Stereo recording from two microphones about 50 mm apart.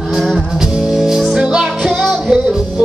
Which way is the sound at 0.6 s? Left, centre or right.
Centre.